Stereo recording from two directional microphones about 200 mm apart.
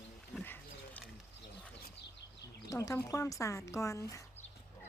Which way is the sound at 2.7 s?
15° left (ahead or behind).